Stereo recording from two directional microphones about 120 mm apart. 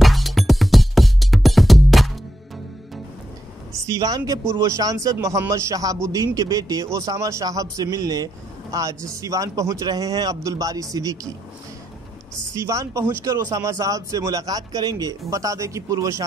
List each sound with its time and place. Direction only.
0.0 s music: centre (ahead or behind)
3.7 s speech: 30° right (ahead or behind)
12.5 s speech: 25° right (ahead or behind)